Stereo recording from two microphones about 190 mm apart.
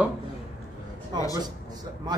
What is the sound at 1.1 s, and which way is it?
Speech, 20° right (ahead or behind).